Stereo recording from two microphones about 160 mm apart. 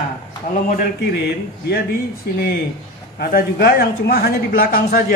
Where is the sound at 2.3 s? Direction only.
80° left.